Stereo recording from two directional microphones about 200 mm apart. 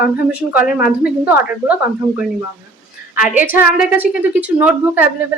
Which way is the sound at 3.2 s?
10° right (ahead or behind).